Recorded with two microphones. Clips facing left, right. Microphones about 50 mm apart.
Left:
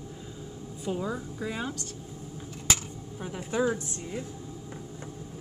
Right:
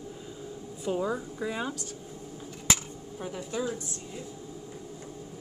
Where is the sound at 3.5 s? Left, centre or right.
Left.